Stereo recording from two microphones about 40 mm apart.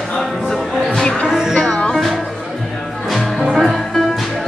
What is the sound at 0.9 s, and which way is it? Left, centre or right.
Music, centre.